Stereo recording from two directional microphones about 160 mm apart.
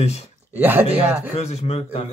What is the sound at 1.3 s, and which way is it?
Speech, 40° left (ahead or behind).